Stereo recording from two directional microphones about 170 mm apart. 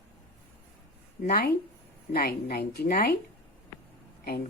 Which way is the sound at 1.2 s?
65° left (ahead or behind).